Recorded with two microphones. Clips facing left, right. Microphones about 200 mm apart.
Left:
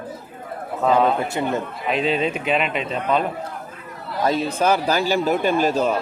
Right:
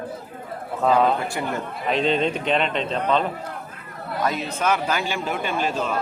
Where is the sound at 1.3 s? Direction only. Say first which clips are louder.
Left 4 dB; 20° left (ahead or behind).